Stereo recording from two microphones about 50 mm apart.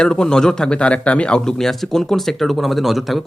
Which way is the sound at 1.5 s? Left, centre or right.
Centre.